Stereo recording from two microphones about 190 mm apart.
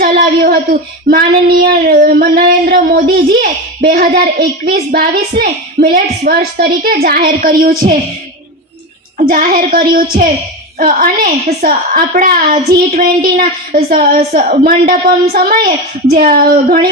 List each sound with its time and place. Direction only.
0.0 s child singing: 50° right (ahead or behind)
9.1 s child singing: 45° right (ahead or behind)